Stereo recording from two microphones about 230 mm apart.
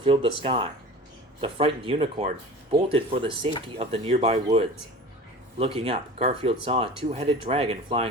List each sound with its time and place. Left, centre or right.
0.0 s speech: right